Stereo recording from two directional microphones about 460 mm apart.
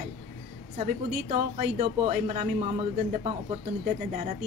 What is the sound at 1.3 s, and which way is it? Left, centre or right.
A woman's voice, centre.